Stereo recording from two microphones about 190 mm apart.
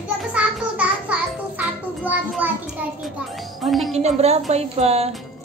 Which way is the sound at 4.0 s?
35° right (ahead or behind).